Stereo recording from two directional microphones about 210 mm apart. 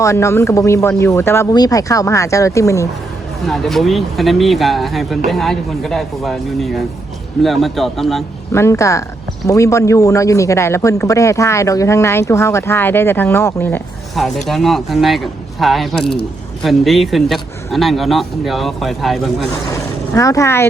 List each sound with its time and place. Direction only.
0.0 s speech: 15° left (ahead or behind)
3.4 s speech: centre (ahead or behind)
8.5 s speech: 15° left (ahead or behind)
19.7 s speech: 15° left (ahead or behind)